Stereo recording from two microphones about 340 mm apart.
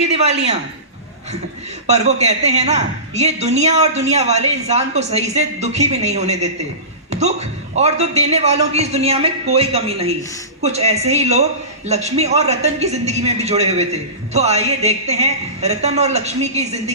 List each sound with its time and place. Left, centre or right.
0.0 s a woman's voice: centre
1.9 s a man's voice: centre